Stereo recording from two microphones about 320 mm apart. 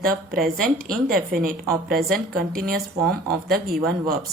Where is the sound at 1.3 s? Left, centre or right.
Right.